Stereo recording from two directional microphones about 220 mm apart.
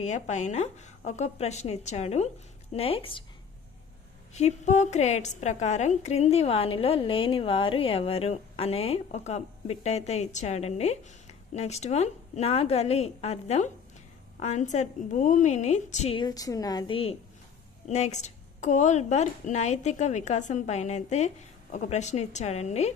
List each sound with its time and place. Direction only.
0.0 s a woman's voice: 30° left (ahead or behind)
4.4 s a woman's voice: 30° left (ahead or behind)